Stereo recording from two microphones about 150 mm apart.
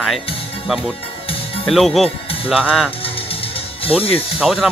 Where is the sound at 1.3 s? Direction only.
40° left (ahead or behind).